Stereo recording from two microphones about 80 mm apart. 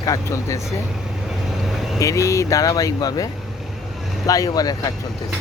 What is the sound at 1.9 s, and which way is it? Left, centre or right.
Speech, left.